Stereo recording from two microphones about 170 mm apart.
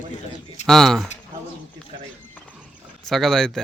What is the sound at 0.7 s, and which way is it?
Speech, centre (ahead or behind).